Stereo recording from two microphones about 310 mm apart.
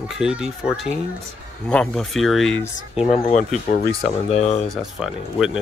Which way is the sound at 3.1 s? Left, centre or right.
Centre.